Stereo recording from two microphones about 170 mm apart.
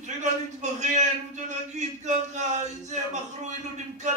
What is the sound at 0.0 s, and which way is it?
A man's voice, 45° right (ahead or behind).